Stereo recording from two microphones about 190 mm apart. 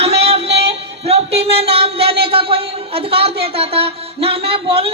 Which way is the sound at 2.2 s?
30° right (ahead or behind).